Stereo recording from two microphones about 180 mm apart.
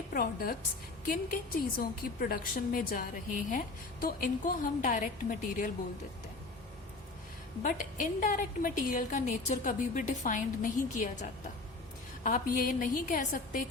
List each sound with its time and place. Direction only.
0.1 s a woman's voice: 55° left (ahead or behind)
7.6 s a woman's voice: 45° left (ahead or behind)